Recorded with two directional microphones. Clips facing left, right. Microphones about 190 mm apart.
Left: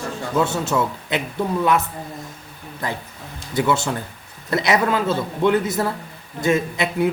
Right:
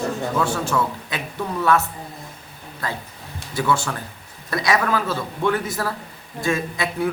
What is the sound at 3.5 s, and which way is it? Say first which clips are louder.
A man's voice: left 2 dB; 20° left (ahead or behind).